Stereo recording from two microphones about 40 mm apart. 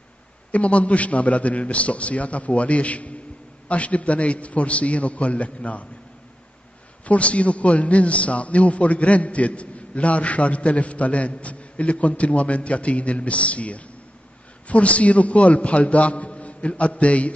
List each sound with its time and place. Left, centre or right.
0.5 s a man's voice: left
7.1 s a man's voice: left